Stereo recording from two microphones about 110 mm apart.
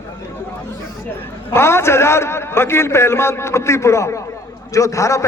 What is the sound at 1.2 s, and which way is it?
A man's voice, 25° left (ahead or behind).